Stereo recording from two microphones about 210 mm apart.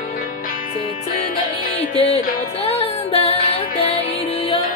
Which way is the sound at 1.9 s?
30° left (ahead or behind).